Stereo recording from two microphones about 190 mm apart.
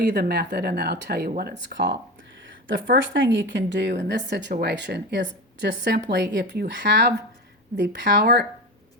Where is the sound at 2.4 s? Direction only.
80° right.